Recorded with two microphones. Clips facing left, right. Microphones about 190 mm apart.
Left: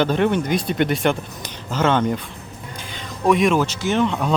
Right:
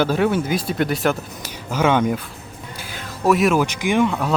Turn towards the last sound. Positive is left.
turn(degrees=-10)  # may be behind; listen again after turning